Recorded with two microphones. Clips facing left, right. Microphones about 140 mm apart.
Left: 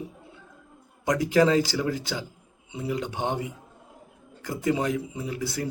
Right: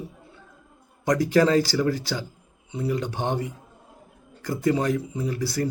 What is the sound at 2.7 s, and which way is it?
Speech, 10° left (ahead or behind).